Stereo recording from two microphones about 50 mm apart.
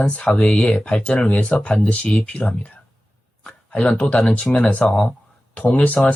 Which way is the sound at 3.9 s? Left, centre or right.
Centre.